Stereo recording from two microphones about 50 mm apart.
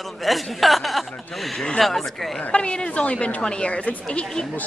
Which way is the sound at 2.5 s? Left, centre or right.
Left.